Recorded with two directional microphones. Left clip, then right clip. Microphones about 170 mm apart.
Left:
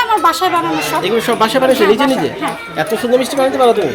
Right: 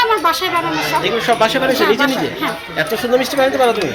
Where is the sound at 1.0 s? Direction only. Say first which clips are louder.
Left 1 dB; 30° left (ahead or behind).